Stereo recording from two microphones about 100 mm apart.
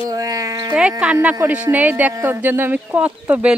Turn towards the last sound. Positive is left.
turn(degrees=-15)  # may be behind; listen again after turning